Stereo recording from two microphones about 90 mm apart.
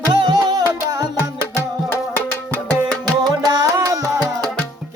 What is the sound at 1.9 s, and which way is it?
Music, 25° left (ahead or behind).